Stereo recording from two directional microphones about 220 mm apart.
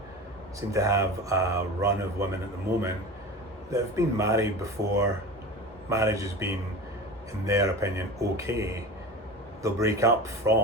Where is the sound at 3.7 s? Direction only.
15° right (ahead or behind).